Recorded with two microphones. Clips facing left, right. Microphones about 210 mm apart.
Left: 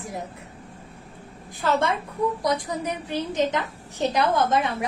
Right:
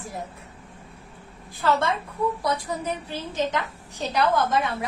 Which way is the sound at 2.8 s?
20° left (ahead or behind).